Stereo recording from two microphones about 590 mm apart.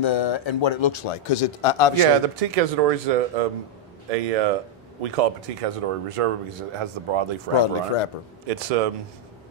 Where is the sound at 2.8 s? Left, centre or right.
Right.